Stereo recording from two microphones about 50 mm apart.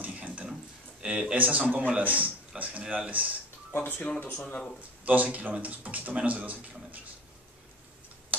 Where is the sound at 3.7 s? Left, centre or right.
Left.